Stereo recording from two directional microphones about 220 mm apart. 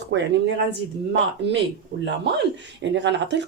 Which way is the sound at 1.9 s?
45° right (ahead or behind).